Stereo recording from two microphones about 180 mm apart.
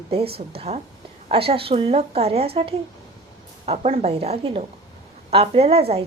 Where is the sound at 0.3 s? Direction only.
35° right (ahead or behind).